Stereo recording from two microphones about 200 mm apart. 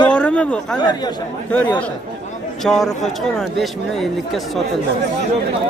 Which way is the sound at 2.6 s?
Centre (ahead or behind).